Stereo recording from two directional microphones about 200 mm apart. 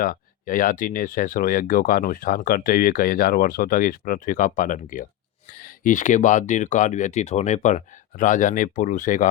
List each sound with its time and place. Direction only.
0.0 s speech: 45° left (ahead or behind)